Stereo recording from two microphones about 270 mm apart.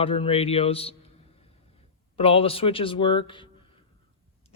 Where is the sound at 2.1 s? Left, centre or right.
Left.